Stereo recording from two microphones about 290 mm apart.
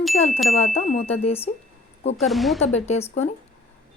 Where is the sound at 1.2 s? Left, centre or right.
Left.